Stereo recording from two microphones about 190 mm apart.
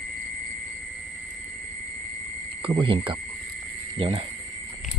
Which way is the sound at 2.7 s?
25° right (ahead or behind).